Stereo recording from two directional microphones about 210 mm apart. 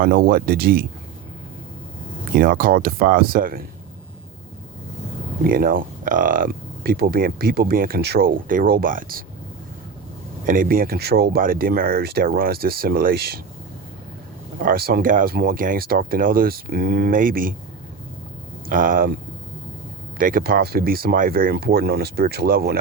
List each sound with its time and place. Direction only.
0.0 s speech: 45° right (ahead or behind)
2.3 s speech: 45° right (ahead or behind)
5.5 s speech: 45° right (ahead or behind)
10.4 s speech: 40° right (ahead or behind)
14.6 s speech: 45° right (ahead or behind)
18.7 s speech: 40° right (ahead or behind)
20.1 s speech: 40° right (ahead or behind)